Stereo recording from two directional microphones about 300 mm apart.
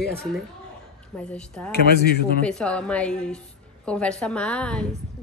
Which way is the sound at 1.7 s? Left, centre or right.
Left.